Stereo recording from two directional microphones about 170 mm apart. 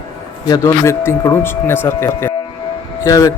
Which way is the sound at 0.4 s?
20° left (ahead or behind).